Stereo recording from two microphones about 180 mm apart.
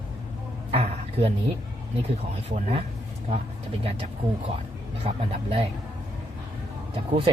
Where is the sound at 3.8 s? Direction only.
35° right (ahead or behind).